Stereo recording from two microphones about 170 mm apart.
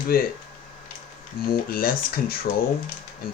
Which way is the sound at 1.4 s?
60° left (ahead or behind).